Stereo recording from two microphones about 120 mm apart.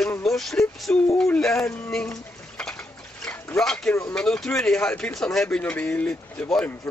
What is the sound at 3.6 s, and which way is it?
A man's voice, 5° left (ahead or behind).